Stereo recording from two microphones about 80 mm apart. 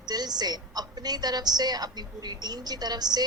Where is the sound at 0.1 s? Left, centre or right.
Right.